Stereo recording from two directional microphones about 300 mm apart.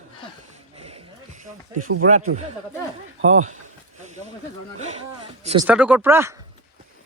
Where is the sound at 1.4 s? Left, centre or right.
Right.